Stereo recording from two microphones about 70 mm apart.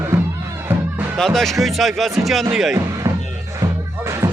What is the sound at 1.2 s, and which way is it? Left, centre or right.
Speech, centre.